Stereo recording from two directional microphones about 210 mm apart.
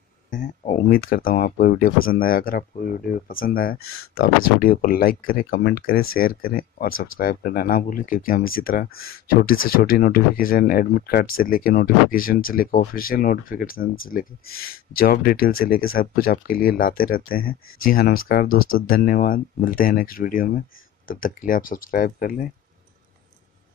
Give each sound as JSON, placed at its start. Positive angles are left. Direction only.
{"t": 0.3, "sound": "speech", "side_deg": 40}
{"t": 3.8, "sound": "speech", "side_deg": 90}
{"t": 4.1, "sound": "speech", "side_deg": 45}